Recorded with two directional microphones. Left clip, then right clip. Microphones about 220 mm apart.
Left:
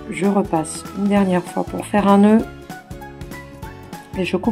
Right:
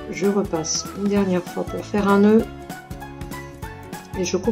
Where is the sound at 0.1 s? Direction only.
40° left (ahead or behind).